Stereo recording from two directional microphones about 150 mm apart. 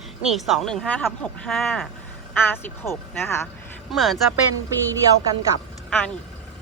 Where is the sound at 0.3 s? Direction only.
Centre (ahead or behind); by 3.4 s 15° left (ahead or behind).